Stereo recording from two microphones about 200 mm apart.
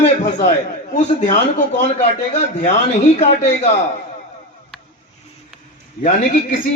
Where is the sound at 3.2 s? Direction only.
35° left (ahead or behind).